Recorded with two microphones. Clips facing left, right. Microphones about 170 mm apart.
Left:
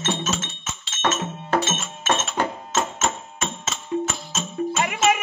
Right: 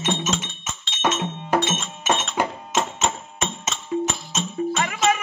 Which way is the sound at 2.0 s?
15° right (ahead or behind).